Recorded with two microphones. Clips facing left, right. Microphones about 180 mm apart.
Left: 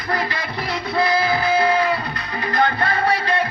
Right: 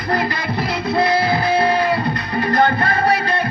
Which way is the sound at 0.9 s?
30° right (ahead or behind).